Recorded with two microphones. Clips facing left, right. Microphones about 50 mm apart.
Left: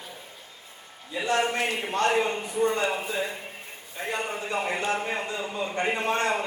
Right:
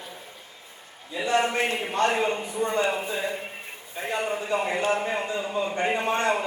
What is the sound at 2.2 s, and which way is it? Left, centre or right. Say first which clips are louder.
Speech: left 1 dB; centre.